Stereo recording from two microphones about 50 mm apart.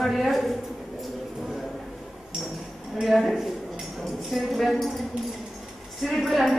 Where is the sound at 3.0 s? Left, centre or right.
Centre.